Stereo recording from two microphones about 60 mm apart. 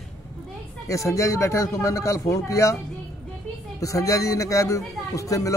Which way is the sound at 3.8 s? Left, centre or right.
Left.